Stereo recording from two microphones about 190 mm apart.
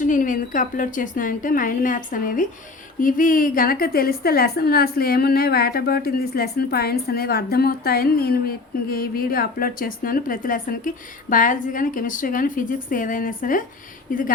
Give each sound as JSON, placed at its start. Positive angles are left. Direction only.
{"t": 0.0, "sound": "a woman's voice", "side_deg": 45}